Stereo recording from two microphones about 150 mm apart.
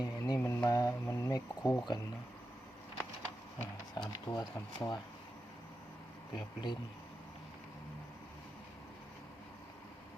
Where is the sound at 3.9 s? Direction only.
25° left (ahead or behind).